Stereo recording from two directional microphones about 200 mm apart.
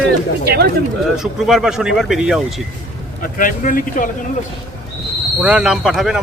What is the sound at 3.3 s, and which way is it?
Speech, 40° left (ahead or behind).